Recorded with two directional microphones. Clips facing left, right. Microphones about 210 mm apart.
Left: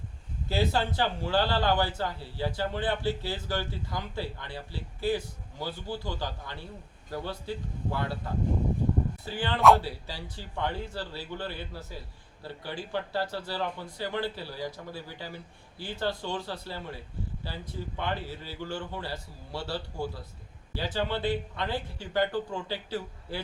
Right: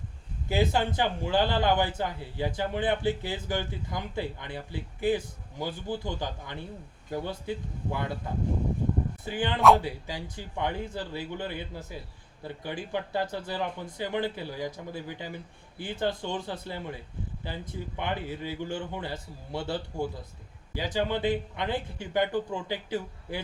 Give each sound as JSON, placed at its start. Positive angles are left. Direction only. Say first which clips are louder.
{"t": 0.4, "sound": "a man's voice", "louder": "right 2 dB", "side_deg": -15}
{"t": 9.6, "sound": "speech", "louder": "even", "side_deg": 0}
{"t": 9.8, "sound": "a man's voice", "louder": "right 3 dB", "side_deg": -15}